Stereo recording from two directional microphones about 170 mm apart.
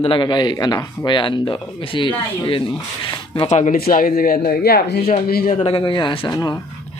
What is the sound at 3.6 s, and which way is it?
A man's voice, 60° left (ahead or behind).